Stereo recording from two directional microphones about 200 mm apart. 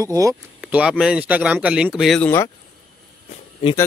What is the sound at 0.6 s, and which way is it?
Speech, 5° right (ahead or behind).